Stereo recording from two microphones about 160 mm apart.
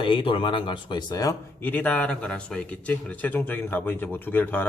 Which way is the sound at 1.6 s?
10° left (ahead or behind).